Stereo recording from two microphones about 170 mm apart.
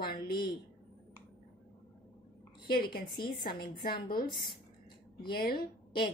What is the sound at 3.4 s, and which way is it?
A woman's voice, 60° left (ahead or behind).